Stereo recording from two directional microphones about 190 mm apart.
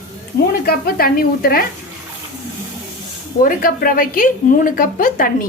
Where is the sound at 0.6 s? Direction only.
55° left (ahead or behind).